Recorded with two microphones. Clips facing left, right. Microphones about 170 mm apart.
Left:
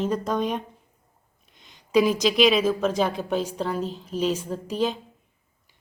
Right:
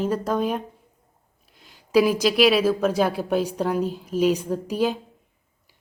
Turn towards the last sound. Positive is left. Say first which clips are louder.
# right 3 dB
turn(degrees=-10)  # may be behind; listen again after turning